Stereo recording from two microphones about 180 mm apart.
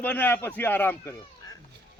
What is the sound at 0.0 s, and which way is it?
Speech, 10° left (ahead or behind).